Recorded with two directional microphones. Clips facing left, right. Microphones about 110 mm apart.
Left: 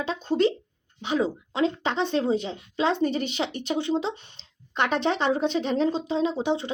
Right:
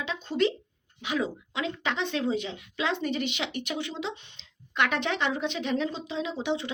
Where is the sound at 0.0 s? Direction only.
35° left (ahead or behind).